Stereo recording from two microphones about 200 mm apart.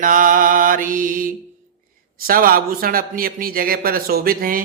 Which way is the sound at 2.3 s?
45° right (ahead or behind).